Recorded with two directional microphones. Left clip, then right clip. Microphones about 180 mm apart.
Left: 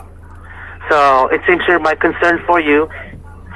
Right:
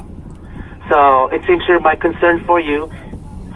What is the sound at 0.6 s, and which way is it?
Speech, 30° left (ahead or behind).